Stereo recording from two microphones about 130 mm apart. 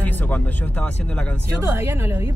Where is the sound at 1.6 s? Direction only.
20° right (ahead or behind).